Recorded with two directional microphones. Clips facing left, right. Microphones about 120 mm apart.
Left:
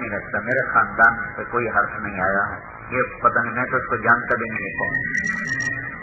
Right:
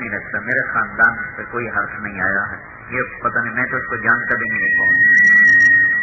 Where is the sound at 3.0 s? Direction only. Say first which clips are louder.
Left 2 dB; 25° left (ahead or behind).